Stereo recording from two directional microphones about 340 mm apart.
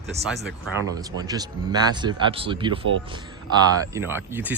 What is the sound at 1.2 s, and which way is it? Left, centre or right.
Speech, centre.